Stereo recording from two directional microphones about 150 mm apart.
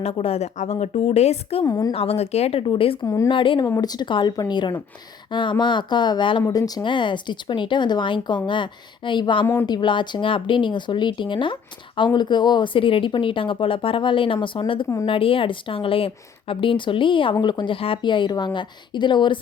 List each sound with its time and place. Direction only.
0.0 s a woman's voice: 40° left (ahead or behind)
1.6 s speech: 25° left (ahead or behind)
1.9 s speech: 40° left (ahead or behind)
3.0 s speech: 20° left (ahead or behind)
3.3 s speech: 35° left (ahead or behind)